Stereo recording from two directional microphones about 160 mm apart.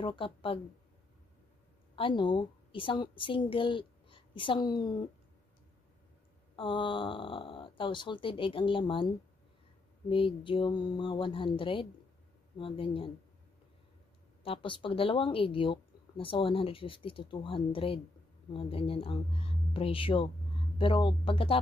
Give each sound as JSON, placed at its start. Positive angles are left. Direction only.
{"t": 0.0, "sound": "speech", "side_deg": 30}
{"t": 2.0, "sound": "a woman's voice", "side_deg": 30}
{"t": 6.5, "sound": "speech", "side_deg": 30}
{"t": 10.0, "sound": "speech", "side_deg": 35}
{"t": 14.4, "sound": "speech", "side_deg": 35}